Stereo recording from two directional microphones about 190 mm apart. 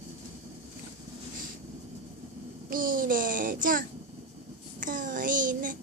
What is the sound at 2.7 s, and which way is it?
Child singing, 45° right (ahead or behind).